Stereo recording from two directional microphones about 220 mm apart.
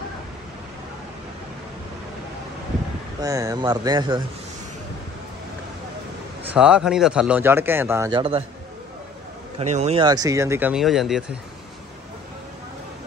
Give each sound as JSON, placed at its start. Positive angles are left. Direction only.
{"t": 3.2, "sound": "speech", "side_deg": -15}
{"t": 6.5, "sound": "speech", "side_deg": -5}
{"t": 9.6, "sound": "speech", "side_deg": -30}